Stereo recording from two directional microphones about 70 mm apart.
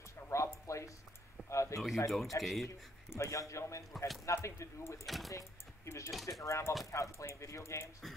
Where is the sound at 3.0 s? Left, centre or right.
Left.